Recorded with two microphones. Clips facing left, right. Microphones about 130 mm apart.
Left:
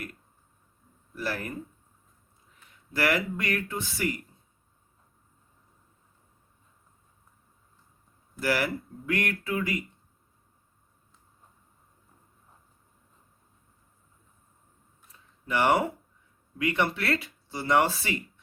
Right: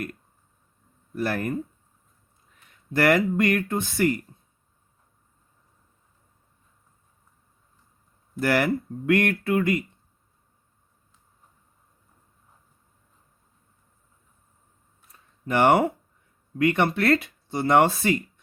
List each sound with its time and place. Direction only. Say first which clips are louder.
1.1 s speech: right 6 dB; 50° right (ahead or behind)
2.9 s speech: right 7 dB; 50° right (ahead or behind)
8.4 s speech: right 5 dB; 50° right (ahead or behind)
15.5 s speech: right 5 dB; 50° right (ahead or behind)